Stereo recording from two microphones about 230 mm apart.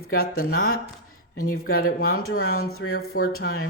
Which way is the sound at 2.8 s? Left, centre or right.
Left.